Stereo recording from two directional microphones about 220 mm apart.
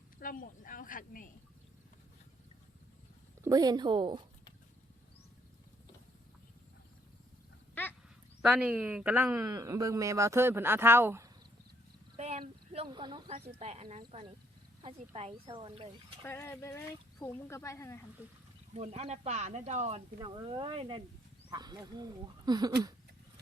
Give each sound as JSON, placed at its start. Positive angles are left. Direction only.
{"t": 0.2, "sound": "speech", "side_deg": 40}
{"t": 3.4, "sound": "speech", "side_deg": -15}
{"t": 7.8, "sound": "wild animals", "side_deg": 10}
{"t": 8.4, "sound": "speech", "side_deg": 0}
{"t": 12.1, "sound": "speech", "side_deg": -30}
{"t": 16.2, "sound": "speech", "side_deg": 10}
{"t": 18.7, "sound": "speech", "side_deg": -30}
{"t": 20.1, "sound": "speech", "side_deg": -20}